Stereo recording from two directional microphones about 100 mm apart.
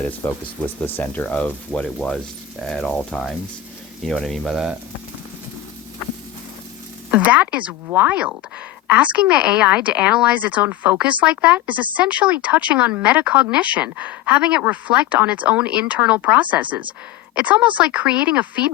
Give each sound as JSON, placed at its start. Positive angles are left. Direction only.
{"t": 0.0, "sound": "speech", "side_deg": 15}
{"t": 7.1, "sound": "speech", "side_deg": -15}